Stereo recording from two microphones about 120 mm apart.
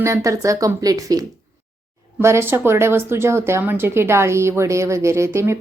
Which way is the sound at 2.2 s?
20° right (ahead or behind).